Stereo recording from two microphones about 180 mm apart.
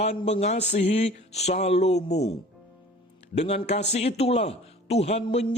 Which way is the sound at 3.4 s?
35° left (ahead or behind).